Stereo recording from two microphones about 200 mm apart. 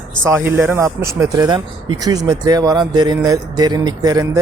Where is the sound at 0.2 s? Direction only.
10° right (ahead or behind).